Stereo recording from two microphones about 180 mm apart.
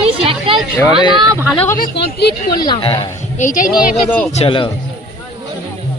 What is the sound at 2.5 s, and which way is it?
Speech, 25° left (ahead or behind).